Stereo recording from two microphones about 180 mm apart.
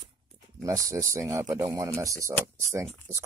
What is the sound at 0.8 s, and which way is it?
Speech, 15° right (ahead or behind).